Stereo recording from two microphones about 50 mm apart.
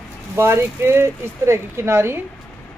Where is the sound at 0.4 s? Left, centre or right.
Right.